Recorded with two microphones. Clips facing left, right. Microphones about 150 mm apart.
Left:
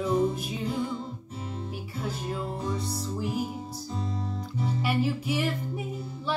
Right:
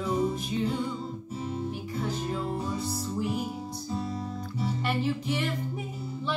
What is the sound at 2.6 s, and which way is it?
Music, 5° right (ahead or behind).